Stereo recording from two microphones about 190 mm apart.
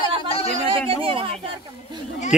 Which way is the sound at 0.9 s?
30° right (ahead or behind).